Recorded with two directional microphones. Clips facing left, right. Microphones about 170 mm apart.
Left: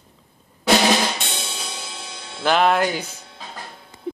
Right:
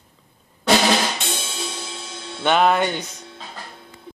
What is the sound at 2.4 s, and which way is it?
Speech, centre (ahead or behind).